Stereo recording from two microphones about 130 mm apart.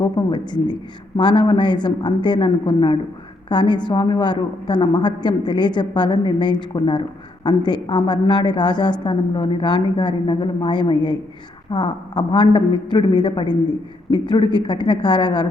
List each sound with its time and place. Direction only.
0.0 s a woman's voice: 35° left (ahead or behind)